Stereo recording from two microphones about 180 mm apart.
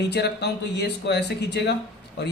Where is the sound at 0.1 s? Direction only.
65° left (ahead or behind).